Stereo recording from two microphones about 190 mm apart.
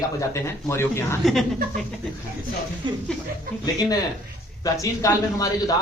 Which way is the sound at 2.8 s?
25° right (ahead or behind).